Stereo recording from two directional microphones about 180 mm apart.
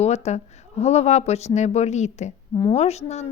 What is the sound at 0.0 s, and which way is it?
Speech, 40° left (ahead or behind).